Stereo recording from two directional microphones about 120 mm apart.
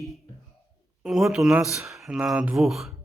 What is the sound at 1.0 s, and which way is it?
Speech, 5° right (ahead or behind).